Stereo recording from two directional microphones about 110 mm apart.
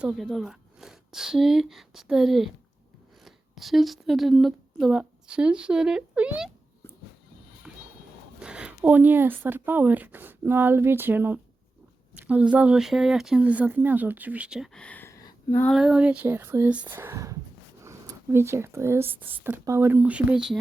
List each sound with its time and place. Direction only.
0.0 s speech: 5° right (ahead or behind)
7.7 s music: 10° right (ahead or behind)
8.4 s speech: 10° right (ahead or behind)
14.7 s speech: 10° left (ahead or behind)
15.1 s a sound: 30° left (ahead or behind)
15.7 s speech: 5° right (ahead or behind)